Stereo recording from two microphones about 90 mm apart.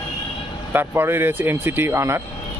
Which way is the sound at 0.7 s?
25° right (ahead or behind).